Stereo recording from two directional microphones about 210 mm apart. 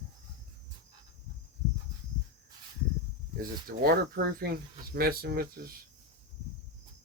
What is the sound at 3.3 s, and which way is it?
Speech, 45° right (ahead or behind).